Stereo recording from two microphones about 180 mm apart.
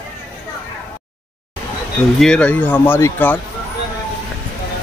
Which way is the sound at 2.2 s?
5° left (ahead or behind).